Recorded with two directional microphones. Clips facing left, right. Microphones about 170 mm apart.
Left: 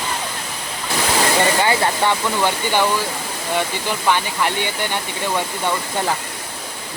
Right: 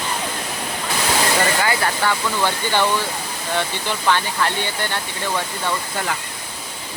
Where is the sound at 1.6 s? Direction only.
25° left (ahead or behind).